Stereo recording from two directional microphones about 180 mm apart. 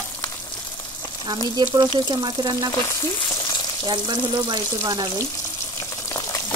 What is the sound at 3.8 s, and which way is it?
Speech, 25° right (ahead or behind).